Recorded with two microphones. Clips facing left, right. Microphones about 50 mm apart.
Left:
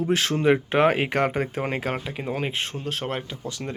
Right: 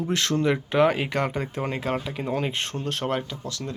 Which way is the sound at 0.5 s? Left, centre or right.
Left.